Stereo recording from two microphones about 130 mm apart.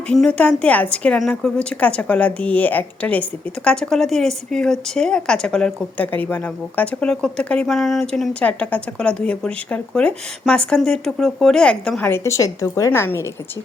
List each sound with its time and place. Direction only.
0.1 s a woman's voice: 10° left (ahead or behind)